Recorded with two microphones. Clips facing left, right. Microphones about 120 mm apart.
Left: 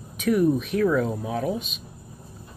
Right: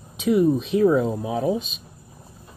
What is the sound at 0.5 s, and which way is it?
Speech, 25° right (ahead or behind).